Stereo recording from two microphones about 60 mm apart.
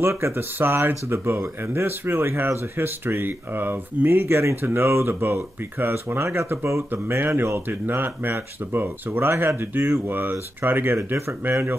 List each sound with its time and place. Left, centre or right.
0.0 s speech: right
10.0 s speech: right